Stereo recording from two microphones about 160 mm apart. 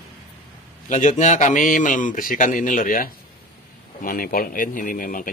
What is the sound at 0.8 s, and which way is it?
A man's voice, 50° left (ahead or behind).